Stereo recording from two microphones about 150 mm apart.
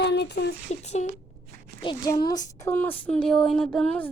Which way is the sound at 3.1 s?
5° left (ahead or behind).